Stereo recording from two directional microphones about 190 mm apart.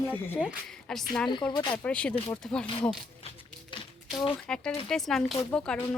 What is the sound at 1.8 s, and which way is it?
Speech, 5° left (ahead or behind).